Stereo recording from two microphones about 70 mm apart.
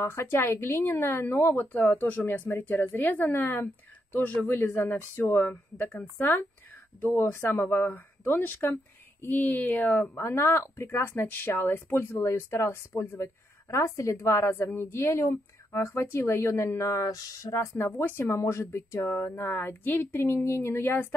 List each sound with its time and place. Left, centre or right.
0.1 s a woman's voice: left
10.1 s speech: left
17.0 s speech: left
17.6 s speech: left
20.4 s speech: left